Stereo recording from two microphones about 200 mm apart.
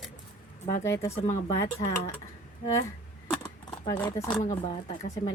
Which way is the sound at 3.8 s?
15° left (ahead or behind).